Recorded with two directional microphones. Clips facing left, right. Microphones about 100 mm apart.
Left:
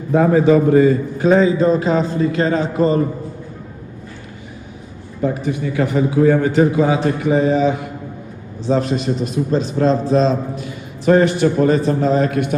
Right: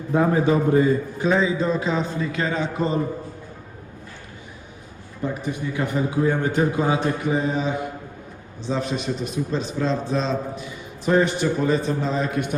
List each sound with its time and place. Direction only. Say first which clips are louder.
0.1 s a man's voice: left 7 dB; 90° left
1.2 s a man's voice: left 9 dB; 50° left (ahead or behind)
5.5 s a man's voice: left 6 dB; 90° left; by 7.7 s 70° left (ahead or behind)
8.6 s a man's voice: left 7 dB; 45° left (ahead or behind)
10.6 s a man's voice: left 6 dB; 60° left (ahead or behind)